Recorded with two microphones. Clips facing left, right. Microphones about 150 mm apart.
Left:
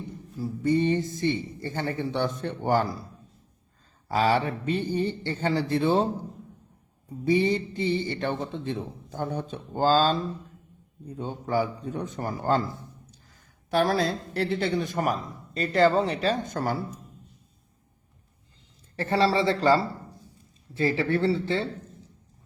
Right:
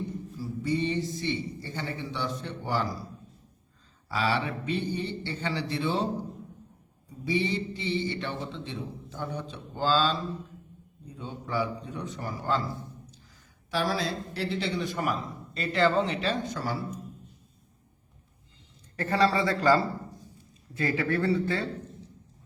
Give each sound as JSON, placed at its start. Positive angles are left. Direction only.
{"t": 0.3, "sound": "a man's voice", "side_deg": 50}
{"t": 4.1, "sound": "a man's voice", "side_deg": 40}
{"t": 7.3, "sound": "a man's voice", "side_deg": 45}
{"t": 11.2, "sound": "a man's voice", "side_deg": 45}
{"t": 18.9, "sound": "speech", "side_deg": 30}